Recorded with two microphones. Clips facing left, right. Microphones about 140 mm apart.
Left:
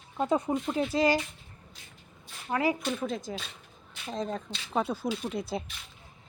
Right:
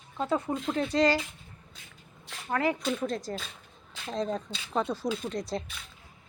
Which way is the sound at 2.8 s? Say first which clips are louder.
Right 1 dB; centre (ahead or behind).